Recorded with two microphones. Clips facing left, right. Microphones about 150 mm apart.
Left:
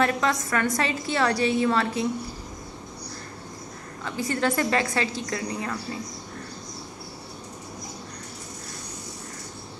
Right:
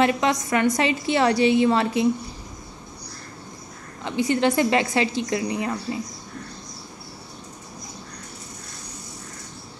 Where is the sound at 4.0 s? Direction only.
25° right (ahead or behind).